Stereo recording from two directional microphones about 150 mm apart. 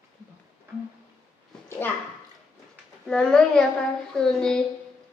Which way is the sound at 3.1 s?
5° left (ahead or behind).